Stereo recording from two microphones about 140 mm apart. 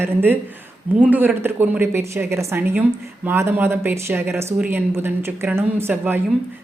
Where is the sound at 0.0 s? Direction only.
15° right (ahead or behind).